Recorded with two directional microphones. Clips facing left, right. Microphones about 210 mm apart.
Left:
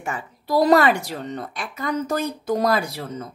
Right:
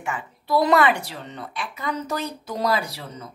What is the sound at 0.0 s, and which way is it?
A woman's voice, 40° left (ahead or behind).